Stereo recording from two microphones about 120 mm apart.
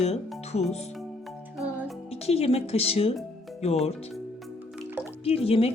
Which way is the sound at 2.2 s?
60° left (ahead or behind).